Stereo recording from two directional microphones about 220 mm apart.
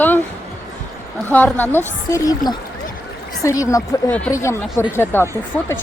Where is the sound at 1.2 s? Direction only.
10° left (ahead or behind).